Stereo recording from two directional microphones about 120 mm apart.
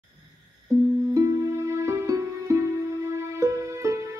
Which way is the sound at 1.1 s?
25° right (ahead or behind).